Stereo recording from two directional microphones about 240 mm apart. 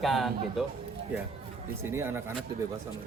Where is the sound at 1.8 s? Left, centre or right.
Centre.